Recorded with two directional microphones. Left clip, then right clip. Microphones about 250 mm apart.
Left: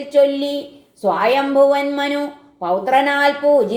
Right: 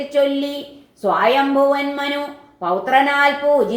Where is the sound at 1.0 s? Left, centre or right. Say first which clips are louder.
Right 1 dB; left.